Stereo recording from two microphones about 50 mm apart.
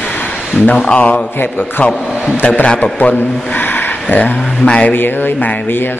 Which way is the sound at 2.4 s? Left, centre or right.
Left.